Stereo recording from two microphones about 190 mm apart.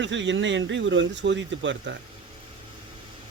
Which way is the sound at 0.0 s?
70° right (ahead or behind).